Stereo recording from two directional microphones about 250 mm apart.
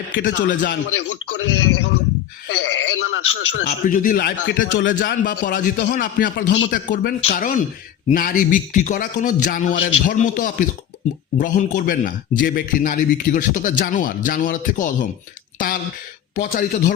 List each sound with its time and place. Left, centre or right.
0.3 s a man's voice: left
0.9 s a man's voice: left
2.5 s a sound: left
3.7 s a man's voice: left
4.9 s a man's voice: left